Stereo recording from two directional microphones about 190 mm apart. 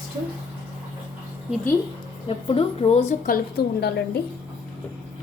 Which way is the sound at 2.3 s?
30° left (ahead or behind).